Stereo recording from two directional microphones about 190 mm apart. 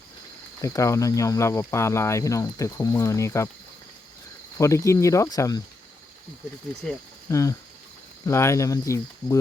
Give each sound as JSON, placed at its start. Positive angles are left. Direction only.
{"t": 0.6, "sound": "speech", "side_deg": 15}
{"t": 4.5, "sound": "speech", "side_deg": 15}
{"t": 6.8, "sound": "speech", "side_deg": 5}
{"t": 7.3, "sound": "speech", "side_deg": 15}